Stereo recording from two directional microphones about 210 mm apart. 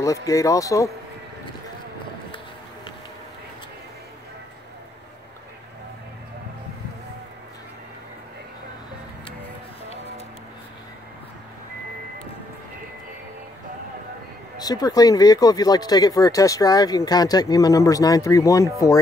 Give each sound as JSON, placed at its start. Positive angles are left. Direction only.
{"t": 0.0, "sound": "speech", "side_deg": 15}
{"t": 14.6, "sound": "speech", "side_deg": 20}